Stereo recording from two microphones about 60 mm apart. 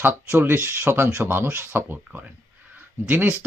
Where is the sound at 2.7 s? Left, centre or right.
Right.